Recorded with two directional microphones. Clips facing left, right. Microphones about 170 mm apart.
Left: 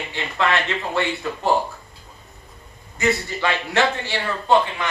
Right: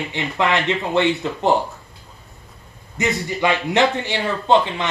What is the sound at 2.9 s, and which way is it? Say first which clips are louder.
A man's voice: even; 20° right (ahead or behind).